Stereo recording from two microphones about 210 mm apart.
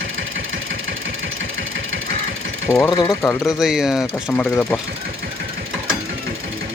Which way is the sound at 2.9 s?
20° left (ahead or behind).